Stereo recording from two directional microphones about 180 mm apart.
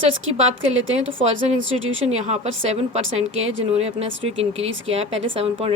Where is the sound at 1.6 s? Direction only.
90° right.